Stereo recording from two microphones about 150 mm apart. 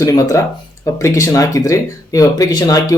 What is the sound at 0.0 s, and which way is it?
Speech, 20° left (ahead or behind).